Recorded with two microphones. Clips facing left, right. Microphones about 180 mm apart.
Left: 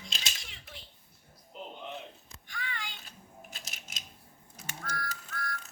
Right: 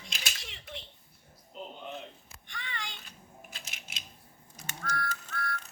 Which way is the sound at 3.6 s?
40° left (ahead or behind).